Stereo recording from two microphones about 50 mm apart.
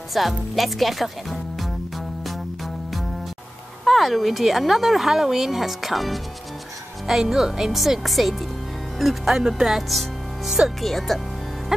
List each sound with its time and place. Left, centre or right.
0.1 s speech: centre
2.2 s music: centre
3.8 s speech: centre